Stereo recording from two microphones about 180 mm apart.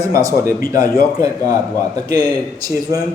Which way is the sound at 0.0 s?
20° right (ahead or behind).